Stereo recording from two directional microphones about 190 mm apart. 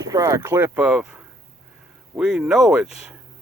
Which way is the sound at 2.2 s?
5° right (ahead or behind).